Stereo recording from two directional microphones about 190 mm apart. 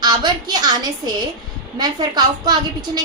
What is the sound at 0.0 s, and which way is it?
A woman's voice, 20° right (ahead or behind).